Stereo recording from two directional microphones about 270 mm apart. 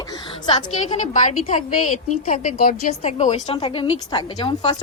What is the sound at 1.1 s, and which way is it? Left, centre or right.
A woman's voice, left.